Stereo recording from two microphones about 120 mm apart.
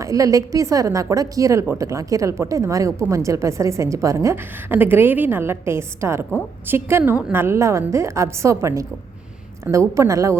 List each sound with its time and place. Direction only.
0.0 s a woman's voice: 25° right (ahead or behind)
9.9 s a woman's voice: 25° right (ahead or behind)